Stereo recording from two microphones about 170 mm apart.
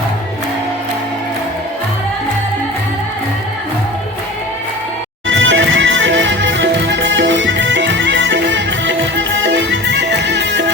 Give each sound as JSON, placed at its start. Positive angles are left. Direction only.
{"t": 5.3, "sound": "music", "side_deg": -90}